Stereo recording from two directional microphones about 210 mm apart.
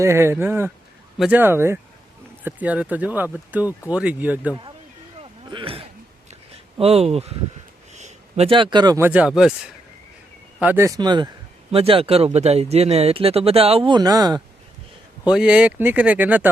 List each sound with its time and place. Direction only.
0.0 s speech: 10° right (ahead or behind)
5.2 s a sound: 25° right (ahead or behind)
6.7 s speech: 30° right (ahead or behind); by 9.6 s centre (ahead or behind)
10.6 s speech: 10° right (ahead or behind)
15.3 s speech: 5° right (ahead or behind)